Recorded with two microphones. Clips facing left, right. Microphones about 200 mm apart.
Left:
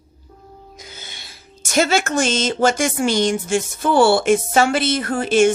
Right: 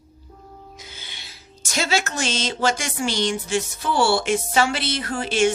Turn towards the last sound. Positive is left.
turn(degrees=50)  # may be behind; listen again after turning